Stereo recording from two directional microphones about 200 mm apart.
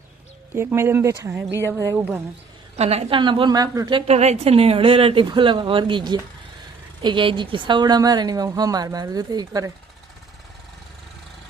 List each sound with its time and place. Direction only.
0.5 s speech: 10° right (ahead or behind)
2.7 s a woman's voice: 30° right (ahead or behind)